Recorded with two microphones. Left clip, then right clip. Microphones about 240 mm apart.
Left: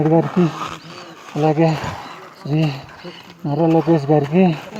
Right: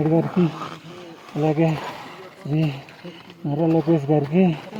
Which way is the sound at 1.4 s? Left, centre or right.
Centre.